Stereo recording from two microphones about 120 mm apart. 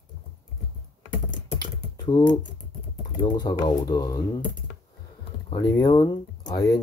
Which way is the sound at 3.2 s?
40° left (ahead or behind).